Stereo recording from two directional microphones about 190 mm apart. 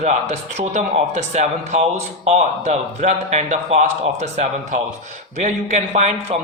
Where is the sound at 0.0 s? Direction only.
35° right (ahead or behind).